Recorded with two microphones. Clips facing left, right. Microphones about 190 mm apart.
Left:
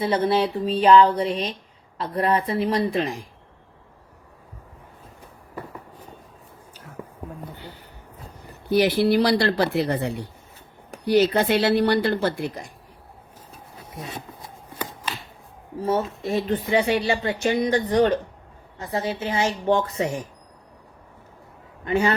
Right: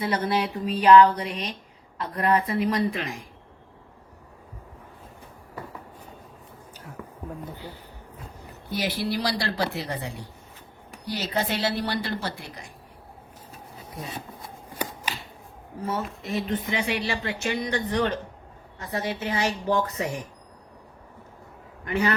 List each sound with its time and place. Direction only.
0.0 s speech: 25° left (ahead or behind)
7.0 s a sound: 25° left (ahead or behind)
8.7 s speech: 60° left (ahead or behind)
15.9 s speech: 30° left (ahead or behind)
21.8 s speech: 25° left (ahead or behind)